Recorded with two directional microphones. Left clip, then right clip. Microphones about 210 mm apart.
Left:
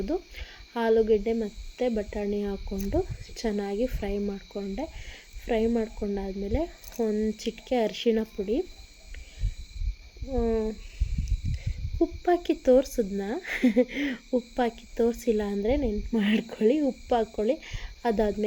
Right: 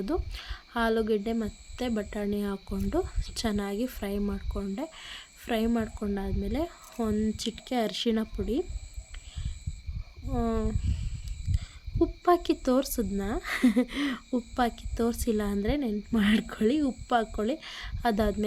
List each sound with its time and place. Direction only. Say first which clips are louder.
0.0 s a woman's voice: left 1 dB; 20° right (ahead or behind)
10.3 s a woman's voice: left 4 dB; 20° right (ahead or behind)
12.2 s a woman's voice: even; 15° right (ahead or behind)